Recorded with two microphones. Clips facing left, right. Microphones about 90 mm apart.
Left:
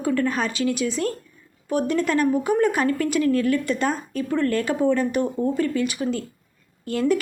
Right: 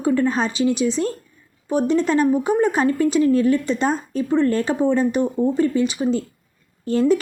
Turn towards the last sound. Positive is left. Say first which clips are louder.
# right 4 dB
turn(degrees=-25)  # may be behind; listen again after turning